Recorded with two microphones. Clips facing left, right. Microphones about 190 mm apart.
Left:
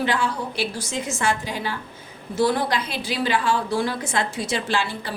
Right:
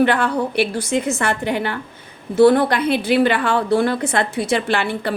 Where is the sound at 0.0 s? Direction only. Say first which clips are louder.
Right 7 dB; 60° right (ahead or behind).